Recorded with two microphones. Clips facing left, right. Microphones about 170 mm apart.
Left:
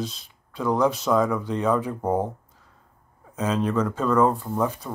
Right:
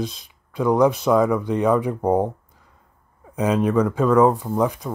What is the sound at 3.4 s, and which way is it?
Speech, 15° right (ahead or behind).